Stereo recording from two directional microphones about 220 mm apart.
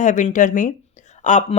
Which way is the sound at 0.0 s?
35° left (ahead or behind).